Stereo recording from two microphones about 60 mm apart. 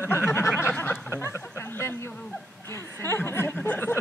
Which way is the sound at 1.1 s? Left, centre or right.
Left.